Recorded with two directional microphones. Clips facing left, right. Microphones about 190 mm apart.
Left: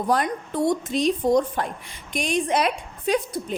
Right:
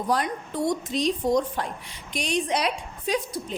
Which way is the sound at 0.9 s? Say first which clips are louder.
Left 3 dB; 55° left (ahead or behind).